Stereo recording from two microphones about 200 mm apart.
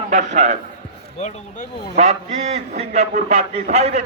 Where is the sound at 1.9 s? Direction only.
35° right (ahead or behind).